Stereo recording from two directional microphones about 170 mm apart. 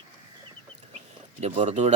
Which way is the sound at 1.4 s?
40° right (ahead or behind).